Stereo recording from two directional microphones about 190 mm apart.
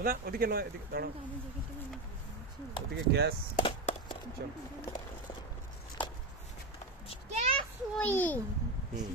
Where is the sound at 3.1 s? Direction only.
60° right (ahead or behind).